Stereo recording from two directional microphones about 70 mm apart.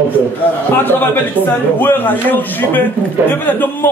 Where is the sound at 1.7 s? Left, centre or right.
Left.